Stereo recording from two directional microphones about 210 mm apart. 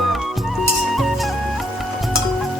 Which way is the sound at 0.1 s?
Centre (ahead or behind).